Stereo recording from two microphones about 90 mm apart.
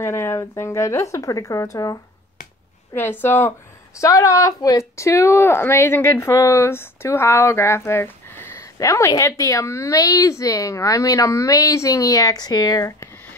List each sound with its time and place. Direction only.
0.0 s a woman's voice: 30° left (ahead or behind)
2.9 s speech: 25° left (ahead or behind)
8.7 s a woman's voice: 35° left (ahead or behind)